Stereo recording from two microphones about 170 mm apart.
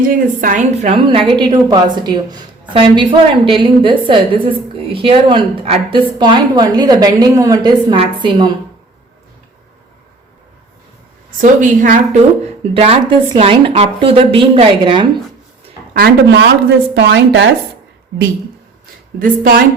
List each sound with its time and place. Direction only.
0.1 s a woman's voice: 50° right (ahead or behind)
1.3 s a woman's voice: 25° right (ahead or behind)
11.3 s a woman's voice: 50° right (ahead or behind)
12.7 s speech: 35° right (ahead or behind)
16.0 s speech: 70° right (ahead or behind); by 17.5 s 90° right
19.2 s speech: 60° right (ahead or behind)